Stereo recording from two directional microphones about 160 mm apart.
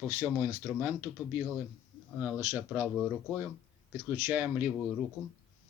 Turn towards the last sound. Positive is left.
turn(degrees=-10)  # may be behind; listen again after turning